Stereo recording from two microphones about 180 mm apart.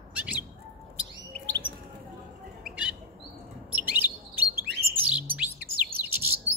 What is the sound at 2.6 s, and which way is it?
Bird, 5° right (ahead or behind).